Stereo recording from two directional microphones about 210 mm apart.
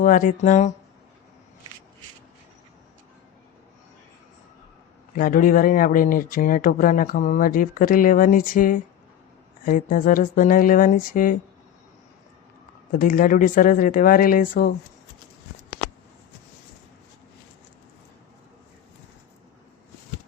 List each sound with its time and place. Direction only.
0.0 s speech: 40° left (ahead or behind)
5.1 s speech: 40° left (ahead or behind)
12.9 s speech: 40° left (ahead or behind)